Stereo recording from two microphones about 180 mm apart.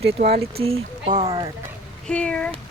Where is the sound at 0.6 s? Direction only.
35° right (ahead or behind).